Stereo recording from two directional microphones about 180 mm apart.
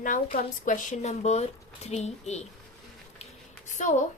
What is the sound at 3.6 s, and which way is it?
Speech, 40° left (ahead or behind).